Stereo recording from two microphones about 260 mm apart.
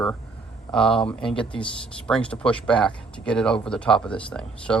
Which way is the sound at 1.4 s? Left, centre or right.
Centre.